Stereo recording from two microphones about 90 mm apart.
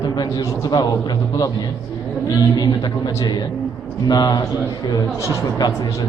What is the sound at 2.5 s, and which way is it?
Speech, 50° left (ahead or behind).